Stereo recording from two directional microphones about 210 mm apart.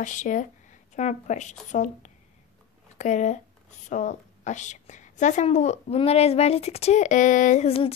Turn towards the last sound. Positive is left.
turn(degrees=30)  # may be behind; listen again after turning